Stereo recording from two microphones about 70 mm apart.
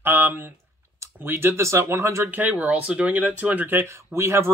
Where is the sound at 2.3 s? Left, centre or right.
Right.